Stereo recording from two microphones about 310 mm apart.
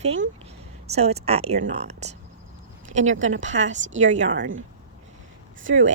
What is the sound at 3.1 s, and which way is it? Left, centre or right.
Speech, right.